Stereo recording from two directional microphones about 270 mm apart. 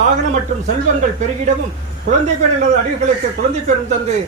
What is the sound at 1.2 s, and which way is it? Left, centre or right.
Speech, right.